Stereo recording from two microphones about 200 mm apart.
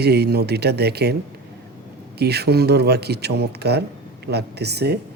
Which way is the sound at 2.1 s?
55° right (ahead or behind).